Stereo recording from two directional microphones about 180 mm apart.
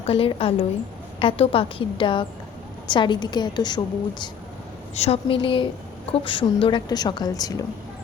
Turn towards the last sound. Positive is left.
turn(degrees=20)  # may be behind; listen again after turning